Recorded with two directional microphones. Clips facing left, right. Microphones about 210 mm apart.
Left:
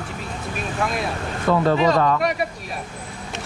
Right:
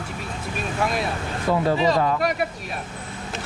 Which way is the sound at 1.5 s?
60° left (ahead or behind).